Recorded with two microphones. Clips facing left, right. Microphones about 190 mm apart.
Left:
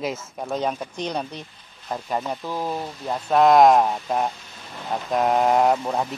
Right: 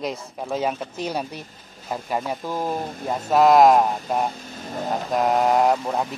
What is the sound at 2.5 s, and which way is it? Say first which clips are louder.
Speech: right 3 dB; 45° right (ahead or behind).